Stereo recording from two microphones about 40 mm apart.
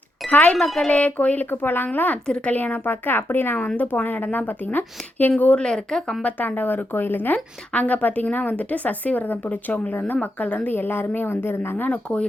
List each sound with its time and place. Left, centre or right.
0.3 s speech: left
0.5 s speech: centre
0.9 s speech: left
1.5 s a woman's voice: left
2.2 s a woman's voice: left
2.5 s a woman's voice: left
3.8 s a woman's voice: left
5.5 s speech: centre
6.2 s a woman's voice: left
7.3 s a woman's voice: left
9.9 s a woman's voice: left
10.2 s speech: left
10.7 s a woman's voice: left